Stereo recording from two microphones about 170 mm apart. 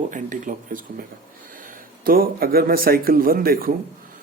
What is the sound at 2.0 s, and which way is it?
A man's voice, 60° right (ahead or behind).